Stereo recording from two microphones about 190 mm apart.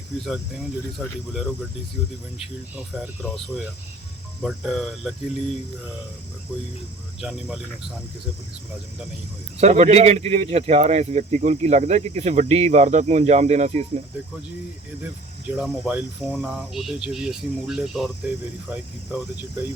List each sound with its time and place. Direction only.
0.9 s speech: centre (ahead or behind)
2.7 s speech: 5° right (ahead or behind)
7.2 s speech: 5° right (ahead or behind)
9.6 s speech: 35° right (ahead or behind)
15.5 s speech: 5° right (ahead or behind)